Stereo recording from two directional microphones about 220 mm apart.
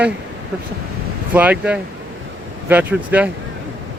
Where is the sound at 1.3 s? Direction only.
5° right (ahead or behind).